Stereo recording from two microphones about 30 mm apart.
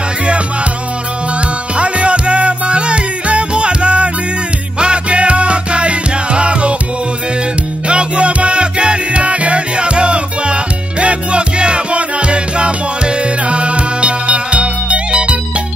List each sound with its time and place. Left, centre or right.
1.8 s music: right
7.9 s music: right